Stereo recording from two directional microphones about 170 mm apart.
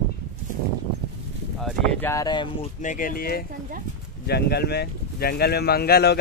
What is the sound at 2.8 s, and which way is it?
Speech, 55° left (ahead or behind).